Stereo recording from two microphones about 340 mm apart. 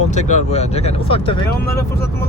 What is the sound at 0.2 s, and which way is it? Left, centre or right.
Speech, left.